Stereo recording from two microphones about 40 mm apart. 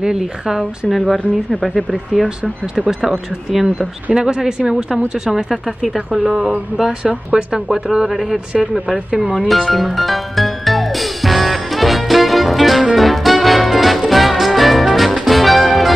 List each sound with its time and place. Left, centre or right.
0.0 s speech: centre
0.8 s speech: centre
3.0 s speech: centre
3.6 s speech: centre
5.3 s speech: centre
9.1 s speech: centre
9.7 s music: centre